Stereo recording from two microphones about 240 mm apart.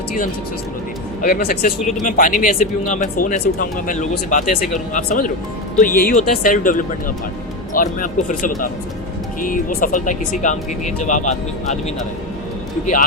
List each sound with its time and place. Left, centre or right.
1.2 s speech: left
4.4 s speech: centre
4.9 s speech: left
12.8 s speech: left